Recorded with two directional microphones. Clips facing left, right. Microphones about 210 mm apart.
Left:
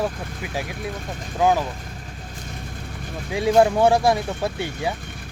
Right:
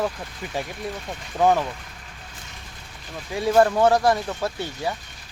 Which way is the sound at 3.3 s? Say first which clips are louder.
Left 1 dB; 15° left (ahead or behind).